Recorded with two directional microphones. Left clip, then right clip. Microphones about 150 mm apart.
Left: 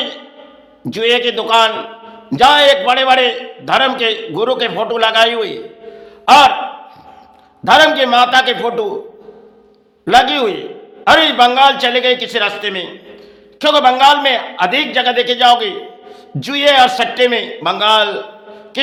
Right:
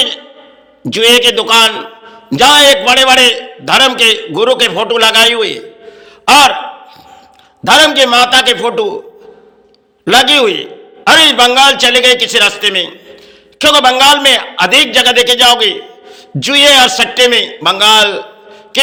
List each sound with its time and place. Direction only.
0.8 s a man's voice: 15° right (ahead or behind)
7.6 s a man's voice: 15° right (ahead or behind)
10.1 s a man's voice: 15° right (ahead or behind)